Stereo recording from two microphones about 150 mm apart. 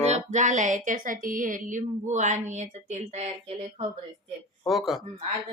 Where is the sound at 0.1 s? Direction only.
50° right (ahead or behind).